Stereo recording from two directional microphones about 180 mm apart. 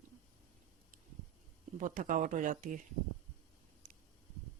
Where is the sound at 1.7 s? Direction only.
45° right (ahead or behind).